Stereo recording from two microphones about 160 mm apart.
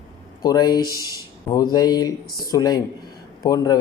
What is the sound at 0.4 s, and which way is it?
Speech, 25° left (ahead or behind).